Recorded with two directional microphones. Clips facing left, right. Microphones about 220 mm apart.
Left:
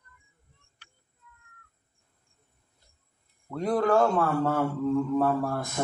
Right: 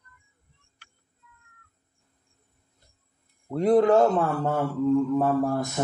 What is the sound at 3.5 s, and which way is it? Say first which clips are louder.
Speech: right 5 dB; 25° right (ahead or behind).